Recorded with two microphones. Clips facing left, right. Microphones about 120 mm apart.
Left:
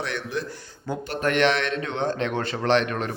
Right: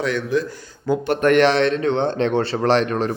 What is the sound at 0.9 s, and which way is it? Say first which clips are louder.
Speech: right 9 dB; 60° right (ahead or behind).